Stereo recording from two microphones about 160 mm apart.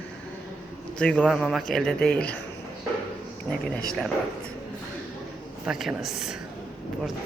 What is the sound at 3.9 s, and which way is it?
Speech, 5° left (ahead or behind).